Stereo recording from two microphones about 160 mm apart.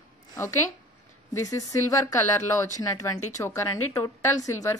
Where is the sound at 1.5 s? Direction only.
20° left (ahead or behind).